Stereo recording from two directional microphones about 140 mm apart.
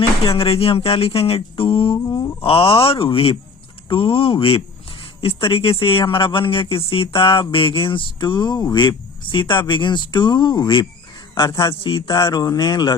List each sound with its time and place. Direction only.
0.3 s speech: 40° left (ahead or behind)
2.0 s a sound: 25° left (ahead or behind)
2.4 s speech: 40° left (ahead or behind)